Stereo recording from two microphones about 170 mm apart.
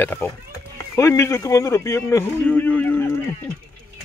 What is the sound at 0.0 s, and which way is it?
Speech, 10° left (ahead or behind).